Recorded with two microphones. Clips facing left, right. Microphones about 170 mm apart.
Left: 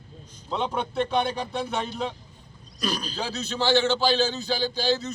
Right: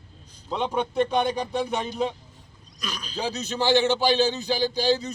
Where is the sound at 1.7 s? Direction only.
10° right (ahead or behind).